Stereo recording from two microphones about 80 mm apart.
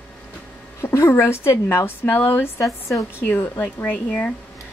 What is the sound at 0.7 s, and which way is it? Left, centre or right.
A woman's voice, left.